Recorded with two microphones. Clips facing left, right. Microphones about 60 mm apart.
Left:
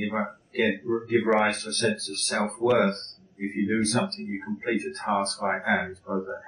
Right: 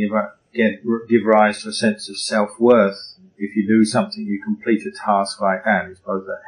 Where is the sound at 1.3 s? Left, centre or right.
Right.